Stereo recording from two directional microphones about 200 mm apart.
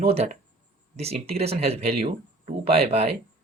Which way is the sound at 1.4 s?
30° right (ahead or behind).